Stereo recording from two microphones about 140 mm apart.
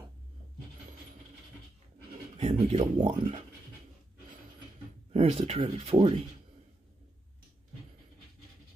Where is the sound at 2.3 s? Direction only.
45° right (ahead or behind).